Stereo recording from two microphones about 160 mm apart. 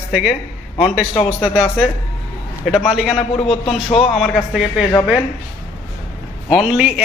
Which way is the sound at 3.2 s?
35° left (ahead or behind).